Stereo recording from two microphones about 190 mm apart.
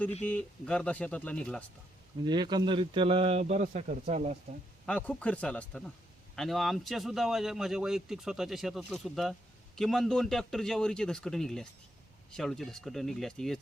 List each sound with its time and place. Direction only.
0.2 s speech: 10° left (ahead or behind)
2.2 s speech: 25° right (ahead or behind)
4.9 s a man's voice: 5° left (ahead or behind)